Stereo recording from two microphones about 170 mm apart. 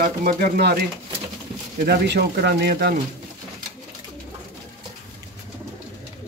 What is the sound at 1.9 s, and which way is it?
Speech, 75° right (ahead or behind).